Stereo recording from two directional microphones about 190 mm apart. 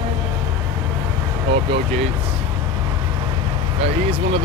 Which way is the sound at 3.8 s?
30° right (ahead or behind).